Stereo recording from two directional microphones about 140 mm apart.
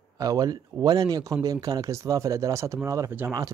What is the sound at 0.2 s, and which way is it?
Speech, 25° right (ahead or behind).